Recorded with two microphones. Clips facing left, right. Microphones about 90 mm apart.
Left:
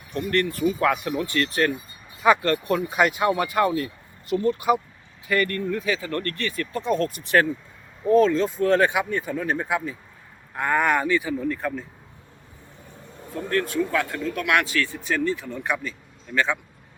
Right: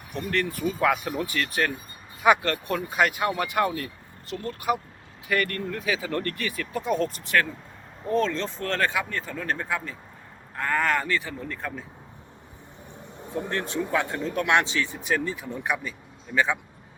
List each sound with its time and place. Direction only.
0.2 s speech: centre (ahead or behind)
6.0 s speech: 15° right (ahead or behind)
8.0 s speech: 5° left (ahead or behind)
12.9 s speech: 20° right (ahead or behind)